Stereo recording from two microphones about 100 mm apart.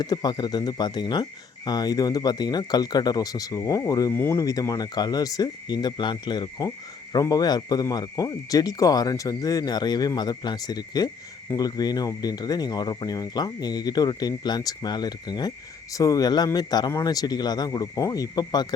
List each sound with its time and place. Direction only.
0.0 s speech: 40° left (ahead or behind)
4.1 s speech: 25° left (ahead or behind)
4.7 s speech: 40° left (ahead or behind)